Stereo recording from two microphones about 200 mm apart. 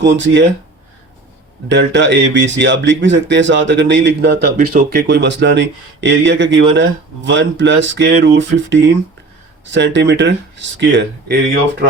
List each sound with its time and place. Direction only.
0.0 s speech: 65° right (ahead or behind)
1.7 s speech: 65° right (ahead or behind)